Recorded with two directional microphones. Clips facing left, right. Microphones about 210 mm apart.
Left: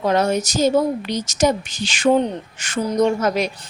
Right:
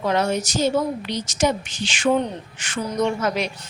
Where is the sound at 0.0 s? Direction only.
40° left (ahead or behind).